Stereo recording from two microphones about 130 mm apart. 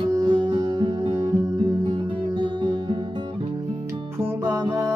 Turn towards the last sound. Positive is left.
turn(degrees=-25)  # may be behind; listen again after turning